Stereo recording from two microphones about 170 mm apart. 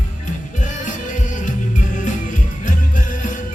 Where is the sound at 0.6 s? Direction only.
45° left (ahead or behind).